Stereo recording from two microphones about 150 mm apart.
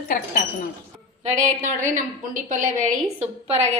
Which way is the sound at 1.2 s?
55° right (ahead or behind).